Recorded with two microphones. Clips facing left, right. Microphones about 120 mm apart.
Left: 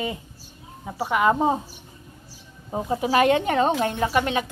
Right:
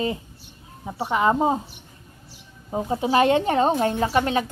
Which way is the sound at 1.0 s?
25° right (ahead or behind).